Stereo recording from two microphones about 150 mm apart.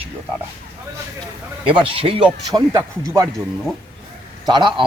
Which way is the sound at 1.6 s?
35° right (ahead or behind).